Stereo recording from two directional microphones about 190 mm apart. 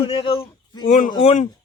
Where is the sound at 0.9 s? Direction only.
45° left (ahead or behind).